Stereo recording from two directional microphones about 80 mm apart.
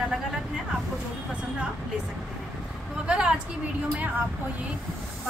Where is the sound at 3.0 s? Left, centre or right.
Centre.